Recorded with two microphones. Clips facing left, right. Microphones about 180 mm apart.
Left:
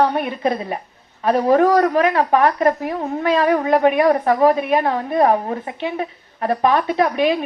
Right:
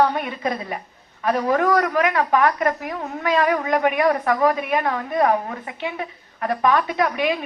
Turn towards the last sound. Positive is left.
turn(degrees=30)  # may be behind; listen again after turning